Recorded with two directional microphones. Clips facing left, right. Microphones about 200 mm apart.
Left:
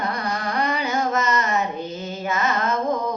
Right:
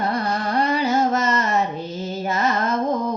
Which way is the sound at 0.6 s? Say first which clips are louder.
Right 4 dB; 30° right (ahead or behind).